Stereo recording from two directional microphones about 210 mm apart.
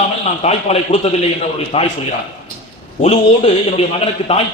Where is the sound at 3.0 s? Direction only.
30° left (ahead or behind).